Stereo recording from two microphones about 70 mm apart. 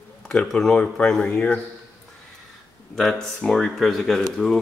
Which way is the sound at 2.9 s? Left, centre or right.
Centre.